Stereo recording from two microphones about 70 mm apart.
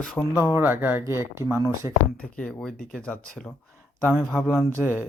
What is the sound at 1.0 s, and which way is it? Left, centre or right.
Speech, right.